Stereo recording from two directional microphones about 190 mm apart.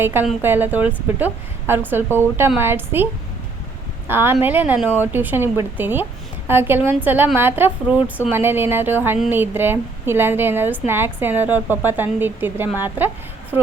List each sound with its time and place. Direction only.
0.0 s speech: 10° right (ahead or behind)
4.1 s speech: 10° right (ahead or behind)